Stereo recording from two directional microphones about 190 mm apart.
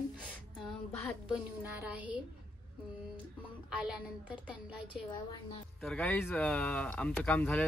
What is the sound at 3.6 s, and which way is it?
Speech, 5° right (ahead or behind).